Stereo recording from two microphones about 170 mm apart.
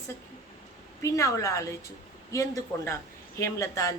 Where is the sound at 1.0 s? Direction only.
20° left (ahead or behind).